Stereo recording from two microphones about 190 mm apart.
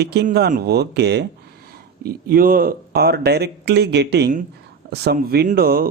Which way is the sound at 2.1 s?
50° right (ahead or behind).